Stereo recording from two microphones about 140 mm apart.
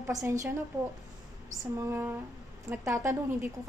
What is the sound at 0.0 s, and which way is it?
Speech, 20° right (ahead or behind).